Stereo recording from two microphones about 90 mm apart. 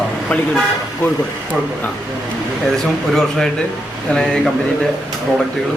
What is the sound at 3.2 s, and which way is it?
Speech, 5° left (ahead or behind).